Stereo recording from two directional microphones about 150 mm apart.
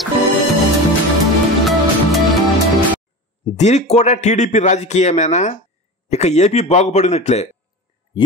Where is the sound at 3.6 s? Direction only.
50° left (ahead or behind).